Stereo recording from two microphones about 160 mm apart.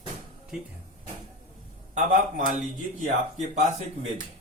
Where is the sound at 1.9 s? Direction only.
55° right (ahead or behind).